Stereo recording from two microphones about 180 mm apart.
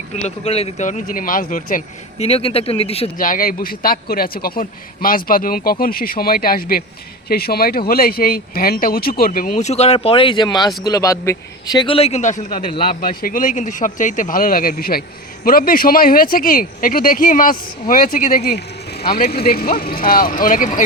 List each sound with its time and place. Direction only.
0.1 s speech: 40° left (ahead or behind)
3.2 s speech: 50° left (ahead or behind)